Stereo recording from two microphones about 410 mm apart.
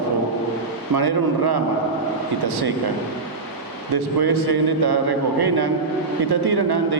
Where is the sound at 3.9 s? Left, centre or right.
Right.